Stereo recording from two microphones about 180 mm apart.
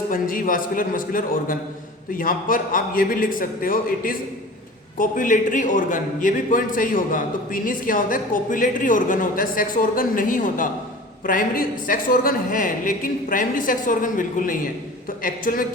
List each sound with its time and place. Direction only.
0.1 s a man's voice: 50° left (ahead or behind)